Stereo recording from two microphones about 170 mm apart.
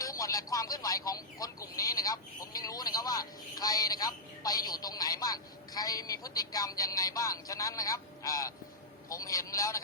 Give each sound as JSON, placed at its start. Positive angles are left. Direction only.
{"t": 0.0, "sound": "a man's voice", "side_deg": 20}